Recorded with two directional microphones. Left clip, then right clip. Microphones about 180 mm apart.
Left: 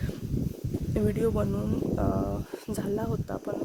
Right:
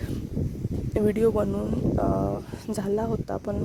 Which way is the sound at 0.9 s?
35° right (ahead or behind).